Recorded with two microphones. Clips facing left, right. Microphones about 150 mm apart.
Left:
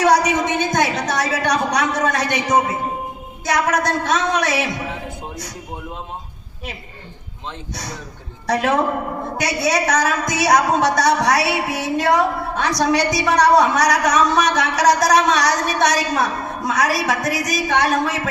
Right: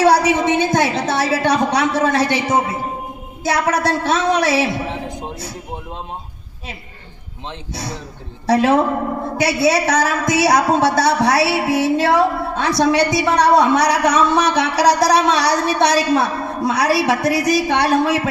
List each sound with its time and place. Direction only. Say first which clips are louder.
0.0 s a woman's voice: right 2 dB; 30° right (ahead or behind)
7.7 s a woman's voice: right 3 dB; 30° right (ahead or behind)